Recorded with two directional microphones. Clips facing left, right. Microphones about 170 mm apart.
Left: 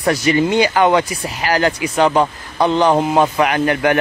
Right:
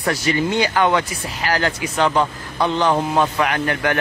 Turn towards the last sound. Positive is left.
turn(degrees=15)  # may be behind; listen again after turning